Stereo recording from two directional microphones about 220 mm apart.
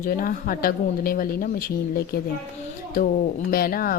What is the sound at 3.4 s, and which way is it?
Speech, 40° left (ahead or behind).